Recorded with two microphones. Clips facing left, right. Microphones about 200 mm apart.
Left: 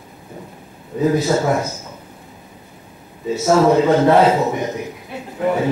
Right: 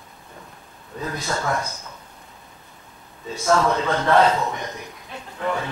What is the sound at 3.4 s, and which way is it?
A man's voice, 25° left (ahead or behind).